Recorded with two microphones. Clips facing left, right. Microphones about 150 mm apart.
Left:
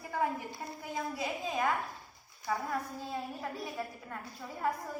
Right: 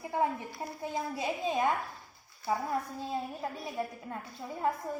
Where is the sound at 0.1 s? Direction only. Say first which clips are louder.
Right 2 dB; 25° right (ahead or behind).